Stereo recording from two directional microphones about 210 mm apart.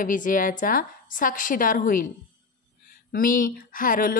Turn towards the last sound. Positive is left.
turn(degrees=40)  # may be behind; listen again after turning